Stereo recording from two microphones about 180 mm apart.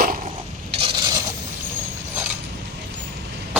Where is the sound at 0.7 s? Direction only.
30° right (ahead or behind).